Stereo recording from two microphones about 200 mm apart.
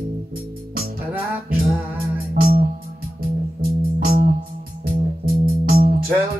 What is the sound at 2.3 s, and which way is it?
Music, 50° right (ahead or behind).